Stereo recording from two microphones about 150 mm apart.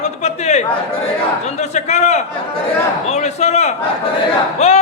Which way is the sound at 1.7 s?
50° left (ahead or behind).